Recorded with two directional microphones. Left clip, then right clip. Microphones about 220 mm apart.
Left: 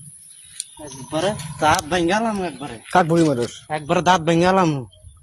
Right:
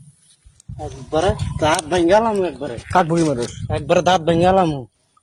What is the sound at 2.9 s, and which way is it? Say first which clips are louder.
Speech: even; 25° left (ahead or behind).